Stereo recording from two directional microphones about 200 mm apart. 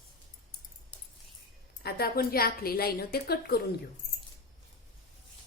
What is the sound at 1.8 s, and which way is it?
A woman's voice, 50° left (ahead or behind).